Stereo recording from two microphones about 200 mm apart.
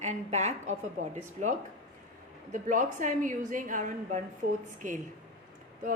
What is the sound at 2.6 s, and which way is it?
A woman's voice, 40° right (ahead or behind).